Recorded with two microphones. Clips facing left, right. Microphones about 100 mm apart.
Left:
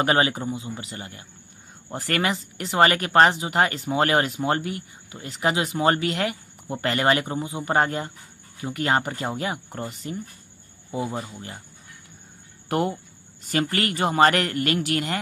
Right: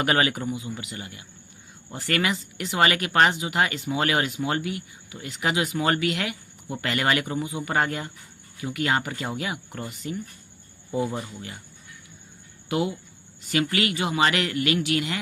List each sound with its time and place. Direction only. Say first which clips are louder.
0.0 s speech: left 2 dB; 30° left (ahead or behind)
12.6 s speech: left 2 dB; 45° left (ahead or behind)